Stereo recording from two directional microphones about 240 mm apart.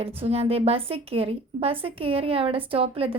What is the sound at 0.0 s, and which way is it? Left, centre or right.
A woman's voice, right.